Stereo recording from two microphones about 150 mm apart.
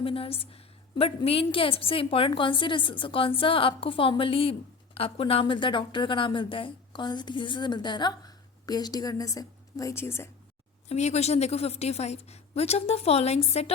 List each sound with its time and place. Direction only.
0.0 s a woman's voice: 40° left (ahead or behind); by 10.2 s 15° left (ahead or behind)
10.8 s a woman's voice: 45° left (ahead or behind)